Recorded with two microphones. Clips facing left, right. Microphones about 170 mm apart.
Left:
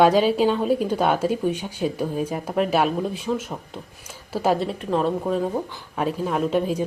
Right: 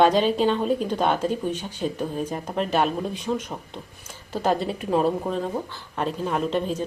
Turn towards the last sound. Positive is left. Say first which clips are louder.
# left 3 dB
turn(degrees=10)  # may be behind; listen again after turning